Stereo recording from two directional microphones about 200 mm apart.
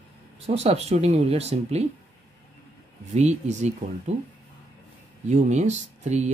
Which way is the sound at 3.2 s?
35° right (ahead or behind).